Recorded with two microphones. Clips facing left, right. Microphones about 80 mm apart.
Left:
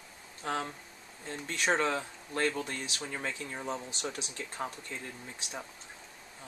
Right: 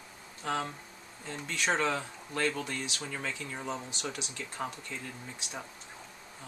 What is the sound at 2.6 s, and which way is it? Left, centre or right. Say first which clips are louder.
Speech: right 1 dB; left.